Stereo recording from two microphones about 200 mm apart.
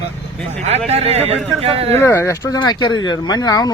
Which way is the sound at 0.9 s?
30° right (ahead or behind).